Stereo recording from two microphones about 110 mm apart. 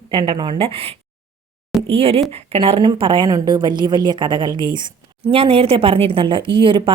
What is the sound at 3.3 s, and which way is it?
A woman's voice, 40° right (ahead or behind).